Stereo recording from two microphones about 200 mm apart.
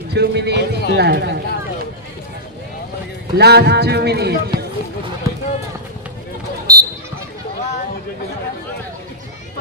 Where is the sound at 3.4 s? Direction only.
55° right (ahead or behind).